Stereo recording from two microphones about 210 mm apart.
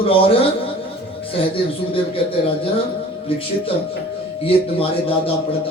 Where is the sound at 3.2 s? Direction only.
25° left (ahead or behind).